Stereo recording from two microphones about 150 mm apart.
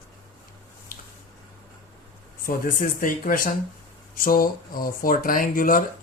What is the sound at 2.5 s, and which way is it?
Speech, 70° left (ahead or behind).